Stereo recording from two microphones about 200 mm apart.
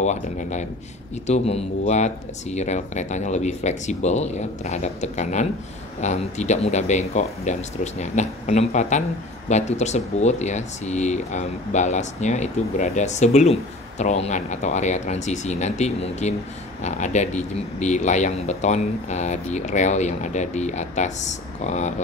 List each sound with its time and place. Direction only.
0.0 s speech: 35° left (ahead or behind)